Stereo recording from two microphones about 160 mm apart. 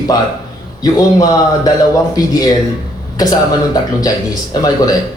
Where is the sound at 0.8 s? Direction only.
25° left (ahead or behind).